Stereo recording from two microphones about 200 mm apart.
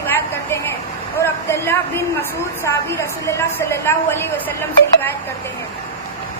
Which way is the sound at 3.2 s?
10° left (ahead or behind).